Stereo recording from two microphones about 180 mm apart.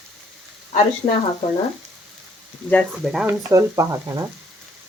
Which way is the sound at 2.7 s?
5° left (ahead or behind).